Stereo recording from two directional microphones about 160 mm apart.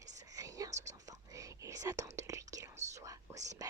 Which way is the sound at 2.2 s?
20° right (ahead or behind).